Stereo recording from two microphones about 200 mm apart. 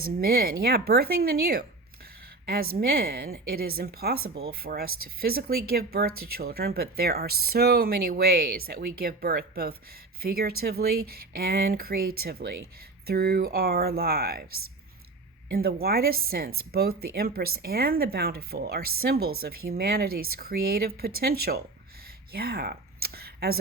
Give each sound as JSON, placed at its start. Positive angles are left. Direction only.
{"t": 0.0, "sound": "speech", "side_deg": -50}
{"t": 2.7, "sound": "speech", "side_deg": -50}
{"t": 22.3, "sound": "a sound", "side_deg": -50}